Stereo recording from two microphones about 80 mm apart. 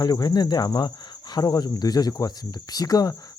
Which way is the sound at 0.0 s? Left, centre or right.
Left.